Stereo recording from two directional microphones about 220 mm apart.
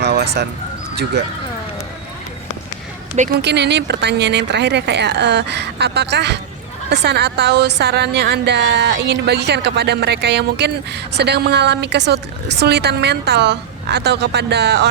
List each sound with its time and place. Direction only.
0.0 s bird: 50° right (ahead or behind)
3.4 s a woman's voice: 50° right (ahead or behind)